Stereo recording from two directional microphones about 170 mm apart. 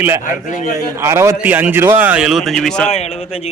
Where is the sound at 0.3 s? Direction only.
50° left (ahead or behind).